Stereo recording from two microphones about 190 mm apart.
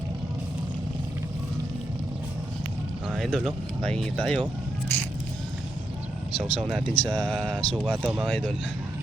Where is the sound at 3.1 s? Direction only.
Centre (ahead or behind).